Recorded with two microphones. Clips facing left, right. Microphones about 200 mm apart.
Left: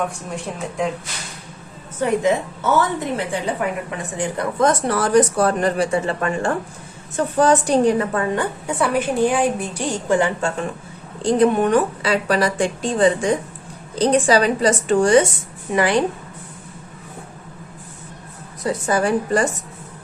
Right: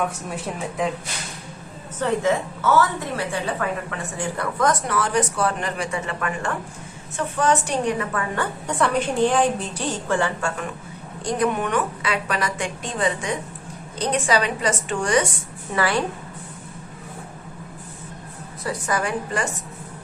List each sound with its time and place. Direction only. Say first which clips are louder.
0.3 s speech: left 1 dB; 5° right (ahead or behind)
2.0 s a woman's voice: left 3 dB; 15° left (ahead or behind); by 8.2 s 35° left (ahead or behind)
8.4 s a woman's voice: left 2 dB; 5° left (ahead or behind)
11.2 s a woman's voice: left 7 dB; 30° left (ahead or behind)
15.7 s a woman's voice: left 5 dB; 20° left (ahead or behind)
18.6 s a woman's voice: left 6 dB; 25° left (ahead or behind)